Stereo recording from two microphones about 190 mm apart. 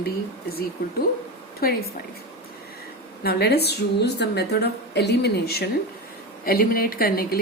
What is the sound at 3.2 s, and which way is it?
A woman's voice, 55° left (ahead or behind).